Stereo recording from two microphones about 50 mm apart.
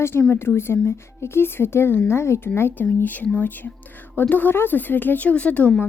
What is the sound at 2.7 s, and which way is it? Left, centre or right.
A woman's voice, left.